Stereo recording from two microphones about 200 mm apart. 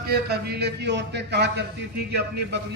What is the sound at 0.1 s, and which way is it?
A man's voice, 55° right (ahead or behind).